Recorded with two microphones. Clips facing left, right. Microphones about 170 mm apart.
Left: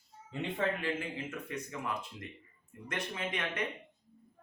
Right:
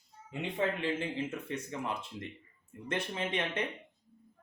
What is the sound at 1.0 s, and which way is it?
Speech, 25° right (ahead or behind).